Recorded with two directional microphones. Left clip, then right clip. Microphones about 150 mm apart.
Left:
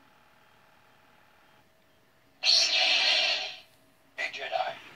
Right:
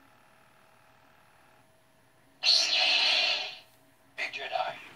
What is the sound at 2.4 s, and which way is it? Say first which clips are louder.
Music: left 1 dB; 5° right (ahead or behind).